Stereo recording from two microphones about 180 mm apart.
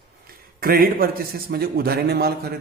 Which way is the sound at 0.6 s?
55° right (ahead or behind).